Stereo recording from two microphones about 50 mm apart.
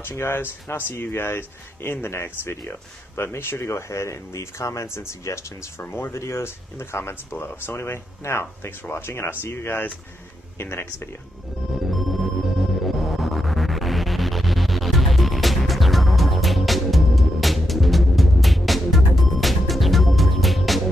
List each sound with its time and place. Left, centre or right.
0.0 s speech: left
0.9 s speech: left
3.6 s speech: left
5.8 s speech: left
6.1 s speech: left
11.7 s music: centre